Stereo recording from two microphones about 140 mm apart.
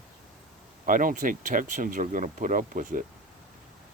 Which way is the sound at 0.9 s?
75° right (ahead or behind).